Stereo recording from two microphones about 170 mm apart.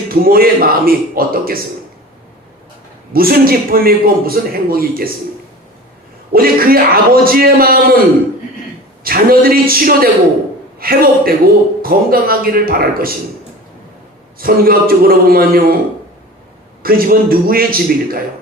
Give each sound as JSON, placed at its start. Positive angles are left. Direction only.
{"t": 0.1, "sound": "a man's voice", "side_deg": -60}
{"t": 3.1, "sound": "a man's voice", "side_deg": -60}
{"t": 6.3, "sound": "a man's voice", "side_deg": -60}
{"t": 9.0, "sound": "a man's voice", "side_deg": -60}
{"t": 14.3, "sound": "a man's voice", "side_deg": -60}
{"t": 16.8, "sound": "a man's voice", "side_deg": -60}